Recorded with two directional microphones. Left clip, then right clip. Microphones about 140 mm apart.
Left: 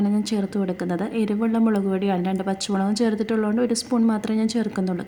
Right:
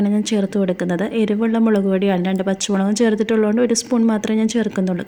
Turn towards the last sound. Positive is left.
turn(degrees=-15)  # may be behind; listen again after turning